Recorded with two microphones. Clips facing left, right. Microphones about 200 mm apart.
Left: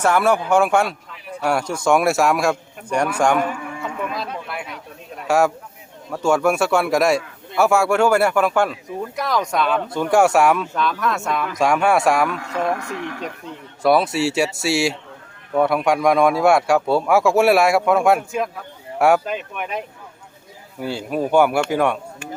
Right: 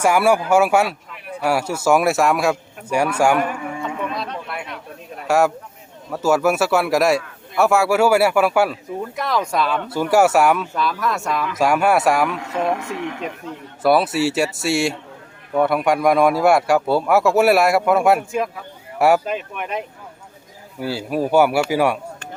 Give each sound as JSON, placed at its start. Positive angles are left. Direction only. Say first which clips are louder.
{"t": 0.0, "sound": "speech", "louder": "right 1 dB", "side_deg": -10}
{"t": 3.8, "sound": "a sound", "louder": "left 1 dB", "side_deg": 0}
{"t": 6.1, "sound": "speech", "louder": "even", "side_deg": -5}
{"t": 12.4, "sound": "speech", "louder": "right 1 dB", "side_deg": -20}
{"t": 13.8, "sound": "speech", "louder": "even", "side_deg": 0}